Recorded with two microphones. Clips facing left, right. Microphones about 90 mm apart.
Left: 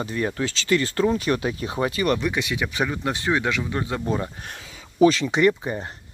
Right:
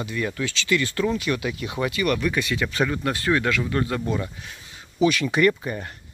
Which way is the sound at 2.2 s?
20° left (ahead or behind).